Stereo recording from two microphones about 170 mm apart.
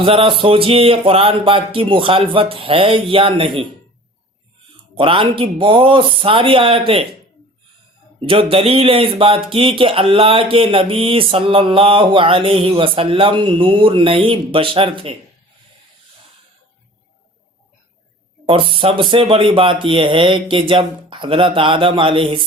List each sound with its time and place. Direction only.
0.0 s speech: 30° right (ahead or behind)
4.9 s speech: 30° right (ahead or behind)
8.2 s speech: 30° right (ahead or behind)
18.4 s speech: 30° right (ahead or behind)